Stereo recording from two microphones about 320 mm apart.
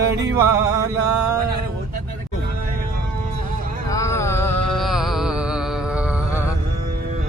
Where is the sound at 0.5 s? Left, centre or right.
Centre.